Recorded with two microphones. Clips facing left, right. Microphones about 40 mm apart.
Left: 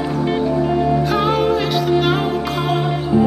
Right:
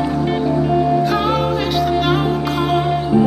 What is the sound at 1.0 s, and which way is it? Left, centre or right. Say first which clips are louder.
Music: even; centre.